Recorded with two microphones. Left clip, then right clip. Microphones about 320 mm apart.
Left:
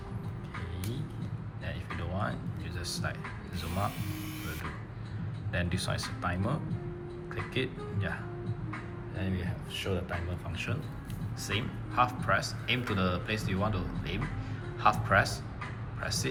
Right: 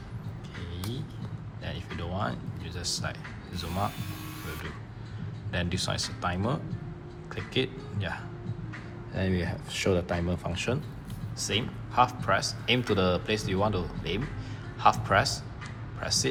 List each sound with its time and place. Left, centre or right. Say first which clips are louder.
1.6 s speech: right 2 dB; centre
5.5 s speech: right 3 dB; centre
9.1 s speech: right 8 dB; centre